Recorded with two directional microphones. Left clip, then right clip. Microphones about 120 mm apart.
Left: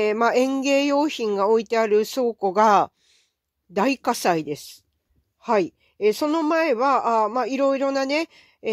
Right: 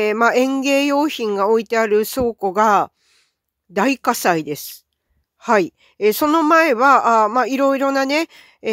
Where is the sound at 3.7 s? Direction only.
25° right (ahead or behind).